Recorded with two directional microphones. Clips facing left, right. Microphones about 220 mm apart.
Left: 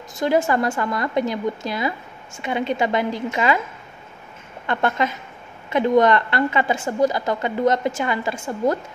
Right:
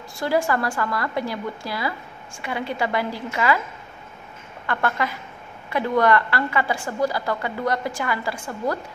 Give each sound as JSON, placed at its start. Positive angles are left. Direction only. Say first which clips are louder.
{"t": 0.1, "sound": "a woman's voice", "louder": "left 3 dB", "side_deg": 20}
{"t": 4.6, "sound": "a woman's voice", "louder": "left 3 dB", "side_deg": 20}